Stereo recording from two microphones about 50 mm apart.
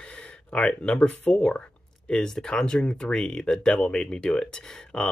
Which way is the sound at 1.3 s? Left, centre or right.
Centre.